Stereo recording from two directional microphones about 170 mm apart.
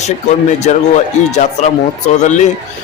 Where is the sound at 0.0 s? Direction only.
40° left (ahead or behind).